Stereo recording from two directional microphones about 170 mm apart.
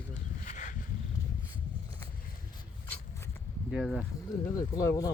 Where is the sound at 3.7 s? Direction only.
Centre (ahead or behind).